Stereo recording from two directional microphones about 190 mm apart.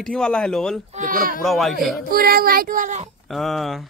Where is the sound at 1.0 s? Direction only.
45° right (ahead or behind).